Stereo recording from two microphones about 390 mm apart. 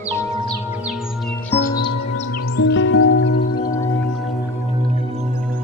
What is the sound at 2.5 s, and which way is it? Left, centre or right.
Music, left.